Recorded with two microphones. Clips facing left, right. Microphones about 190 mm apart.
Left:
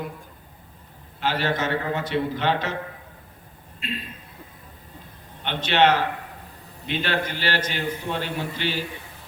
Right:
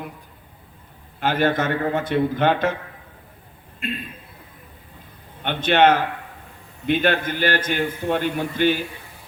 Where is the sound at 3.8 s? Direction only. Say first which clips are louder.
Right 4 dB; 50° right (ahead or behind).